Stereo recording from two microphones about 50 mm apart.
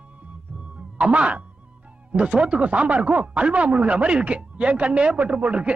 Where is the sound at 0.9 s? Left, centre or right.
Right.